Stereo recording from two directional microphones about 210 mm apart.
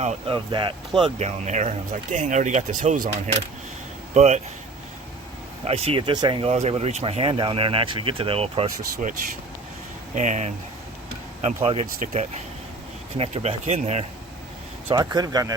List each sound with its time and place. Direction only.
0.0 s speech: 30° right (ahead or behind)
1.2 s speech: 35° right (ahead or behind)
4.1 s speech: 35° right (ahead or behind)
5.6 s speech: 30° right (ahead or behind)
9.0 s speech: 35° right (ahead or behind)
14.8 s speech: 20° right (ahead or behind)